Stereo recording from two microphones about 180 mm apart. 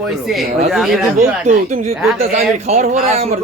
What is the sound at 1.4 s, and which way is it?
Speech, 40° right (ahead or behind).